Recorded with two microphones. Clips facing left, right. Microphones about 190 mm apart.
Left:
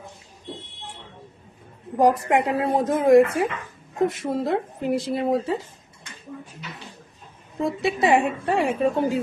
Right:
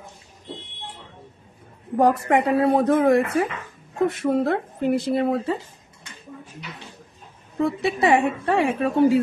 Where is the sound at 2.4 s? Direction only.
65° right (ahead or behind).